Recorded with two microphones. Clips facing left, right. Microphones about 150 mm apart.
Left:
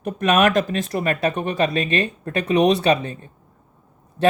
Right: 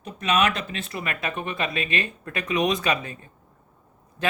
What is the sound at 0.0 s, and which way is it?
Speech, 50° left (ahead or behind).